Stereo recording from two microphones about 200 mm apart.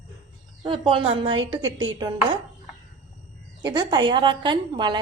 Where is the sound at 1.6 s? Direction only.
75° right (ahead or behind).